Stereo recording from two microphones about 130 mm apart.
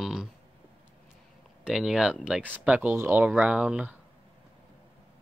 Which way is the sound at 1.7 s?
5° right (ahead or behind).